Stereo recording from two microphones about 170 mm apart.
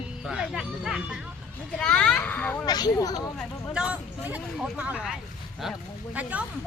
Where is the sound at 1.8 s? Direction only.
5° left (ahead or behind).